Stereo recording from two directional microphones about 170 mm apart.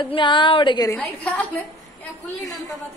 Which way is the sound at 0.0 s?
30° left (ahead or behind).